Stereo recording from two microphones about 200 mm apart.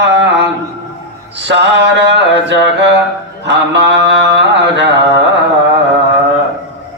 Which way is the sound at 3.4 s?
60° right (ahead or behind).